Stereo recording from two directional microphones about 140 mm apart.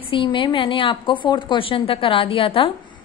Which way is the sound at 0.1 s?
35° left (ahead or behind).